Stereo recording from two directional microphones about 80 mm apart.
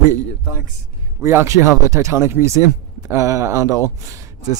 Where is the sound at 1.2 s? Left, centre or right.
Right.